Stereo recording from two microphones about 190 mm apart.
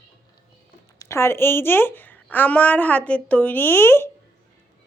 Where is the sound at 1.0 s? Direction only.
15° left (ahead or behind).